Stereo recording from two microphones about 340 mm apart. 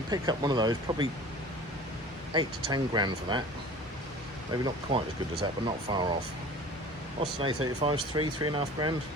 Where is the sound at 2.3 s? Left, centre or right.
Centre.